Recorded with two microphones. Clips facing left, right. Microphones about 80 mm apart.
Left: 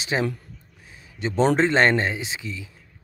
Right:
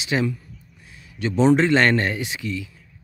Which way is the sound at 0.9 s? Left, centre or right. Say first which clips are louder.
Right 2 dB; left.